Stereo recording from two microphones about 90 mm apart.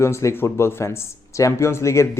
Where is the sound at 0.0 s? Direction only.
30° left (ahead or behind).